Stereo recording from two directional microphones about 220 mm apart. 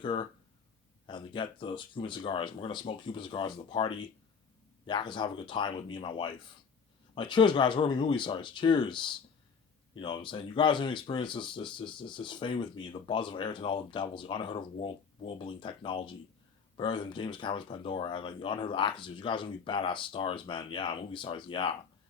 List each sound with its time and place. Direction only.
0.0 s speech: 20° left (ahead or behind)